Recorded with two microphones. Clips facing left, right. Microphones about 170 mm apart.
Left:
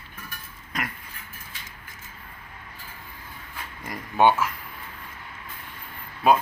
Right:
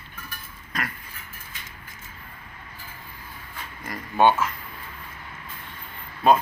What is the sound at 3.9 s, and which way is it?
Speech, 15° left (ahead or behind).